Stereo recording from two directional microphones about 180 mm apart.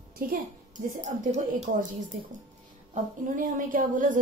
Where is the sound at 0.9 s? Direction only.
40° right (ahead or behind).